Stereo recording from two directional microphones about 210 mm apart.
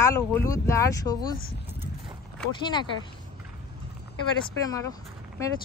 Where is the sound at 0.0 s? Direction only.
15° left (ahead or behind).